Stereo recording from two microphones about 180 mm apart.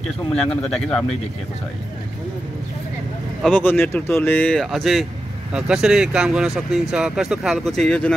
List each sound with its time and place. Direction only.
0.3 s speech: 5° left (ahead or behind)
3.4 s speech: 10° left (ahead or behind)